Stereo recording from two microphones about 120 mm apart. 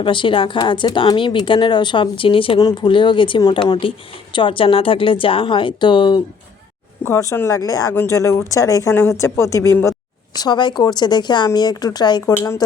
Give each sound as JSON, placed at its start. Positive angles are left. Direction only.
{"t": 0.0, "sound": "speech", "side_deg": 45}
{"t": 2.6, "sound": "speech", "side_deg": 35}
{"t": 7.0, "sound": "speech", "side_deg": 25}
{"t": 10.3, "sound": "speech", "side_deg": 35}
{"t": 12.2, "sound": "speech", "side_deg": 20}